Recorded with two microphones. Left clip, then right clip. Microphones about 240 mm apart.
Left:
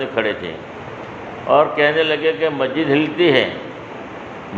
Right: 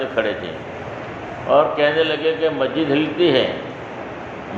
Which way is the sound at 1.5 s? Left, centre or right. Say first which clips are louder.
Left 1 dB; left.